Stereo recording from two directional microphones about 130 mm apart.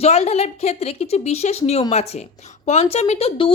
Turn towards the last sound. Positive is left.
turn(degrees=45)  # may be behind; listen again after turning